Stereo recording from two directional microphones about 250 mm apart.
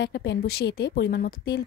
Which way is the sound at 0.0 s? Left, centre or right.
Left.